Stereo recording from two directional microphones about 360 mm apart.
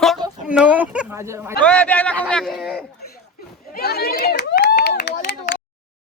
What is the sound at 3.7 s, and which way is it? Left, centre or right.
Run, left.